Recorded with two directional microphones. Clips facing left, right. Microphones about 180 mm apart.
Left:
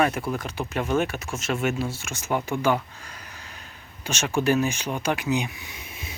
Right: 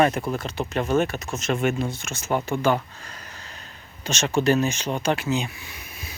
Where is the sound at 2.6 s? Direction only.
10° left (ahead or behind).